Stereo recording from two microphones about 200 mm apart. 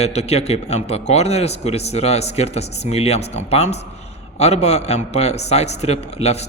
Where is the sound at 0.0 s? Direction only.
30° left (ahead or behind).